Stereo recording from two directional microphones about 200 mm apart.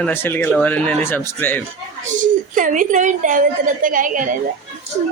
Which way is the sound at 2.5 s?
40° right (ahead or behind).